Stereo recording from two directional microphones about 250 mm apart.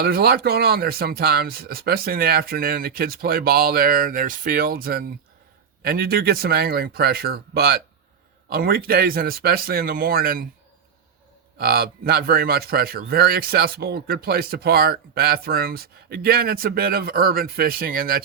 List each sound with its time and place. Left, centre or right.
0.0 s speech: right
11.5 s speech: right